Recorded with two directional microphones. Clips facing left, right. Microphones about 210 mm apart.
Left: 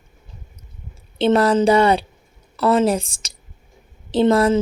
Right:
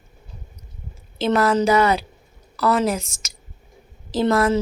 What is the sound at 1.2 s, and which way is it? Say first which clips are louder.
A woman's voice: left 3 dB; 30° left (ahead or behind).